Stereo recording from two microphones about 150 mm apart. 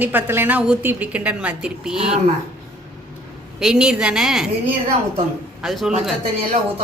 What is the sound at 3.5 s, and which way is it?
Speech, 5° right (ahead or behind).